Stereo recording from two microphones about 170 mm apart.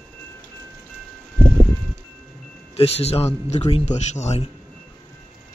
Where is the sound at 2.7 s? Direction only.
35° left (ahead or behind).